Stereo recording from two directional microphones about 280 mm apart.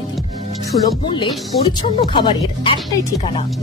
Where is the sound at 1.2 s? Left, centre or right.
Centre.